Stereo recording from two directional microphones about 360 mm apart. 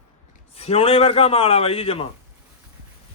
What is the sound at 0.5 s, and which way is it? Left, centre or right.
A man's voice, centre.